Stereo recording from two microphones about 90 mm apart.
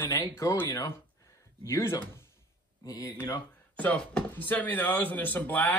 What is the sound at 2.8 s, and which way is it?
Speech, 45° left (ahead or behind).